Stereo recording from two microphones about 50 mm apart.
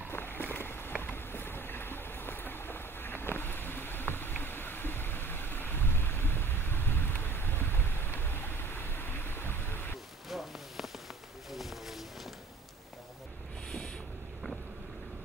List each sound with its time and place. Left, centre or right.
0.1 s run: left
1.0 s boat: left
10.3 s a sound: centre
11.5 s music: centre